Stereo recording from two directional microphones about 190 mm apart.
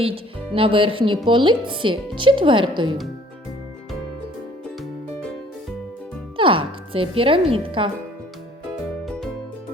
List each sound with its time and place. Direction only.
0.0 s speech: 30° right (ahead or behind)
6.3 s speech: 25° right (ahead or behind)